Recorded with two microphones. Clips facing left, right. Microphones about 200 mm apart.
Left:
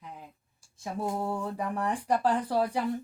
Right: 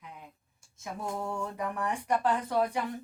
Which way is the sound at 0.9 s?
30° left (ahead or behind).